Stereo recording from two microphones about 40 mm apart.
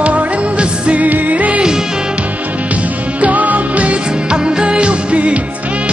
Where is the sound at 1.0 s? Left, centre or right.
Right.